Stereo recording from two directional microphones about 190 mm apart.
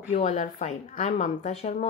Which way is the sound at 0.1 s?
35° left (ahead or behind).